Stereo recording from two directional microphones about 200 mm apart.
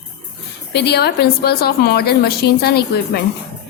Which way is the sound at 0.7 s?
55° left (ahead or behind).